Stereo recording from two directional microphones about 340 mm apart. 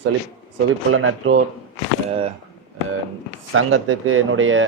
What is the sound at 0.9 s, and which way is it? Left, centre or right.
Speech, right.